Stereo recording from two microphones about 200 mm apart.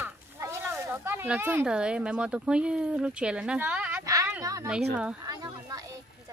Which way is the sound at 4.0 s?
15° right (ahead or behind).